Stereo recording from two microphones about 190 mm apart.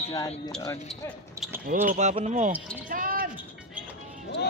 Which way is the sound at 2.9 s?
45° right (ahead or behind).